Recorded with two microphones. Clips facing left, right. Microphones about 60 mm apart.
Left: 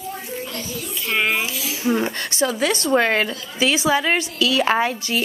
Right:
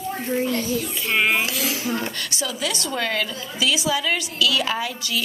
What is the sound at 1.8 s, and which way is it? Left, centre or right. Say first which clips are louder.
Speech: left 11 dB; centre.